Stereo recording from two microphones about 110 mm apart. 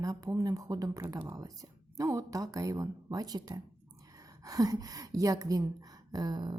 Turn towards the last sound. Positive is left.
turn(degrees=-40)  # may be behind; listen again after turning